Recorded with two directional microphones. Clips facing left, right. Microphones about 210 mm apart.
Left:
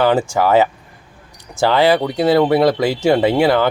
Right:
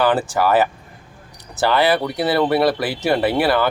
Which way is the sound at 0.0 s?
15° left (ahead or behind).